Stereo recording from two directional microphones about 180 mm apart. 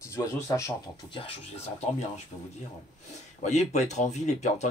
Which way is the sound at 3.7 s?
40° left (ahead or behind).